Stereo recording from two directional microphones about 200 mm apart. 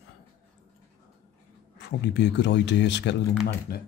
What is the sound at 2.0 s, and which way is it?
Speech, 60° left (ahead or behind).